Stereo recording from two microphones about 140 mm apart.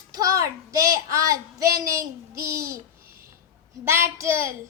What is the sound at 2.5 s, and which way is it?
Babbling, 20° right (ahead or behind).